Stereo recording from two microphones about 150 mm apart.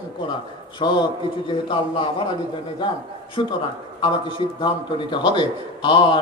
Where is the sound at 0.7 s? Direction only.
30° left (ahead or behind).